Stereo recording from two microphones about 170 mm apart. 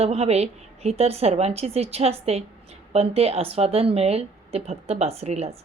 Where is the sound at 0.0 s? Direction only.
40° right (ahead or behind).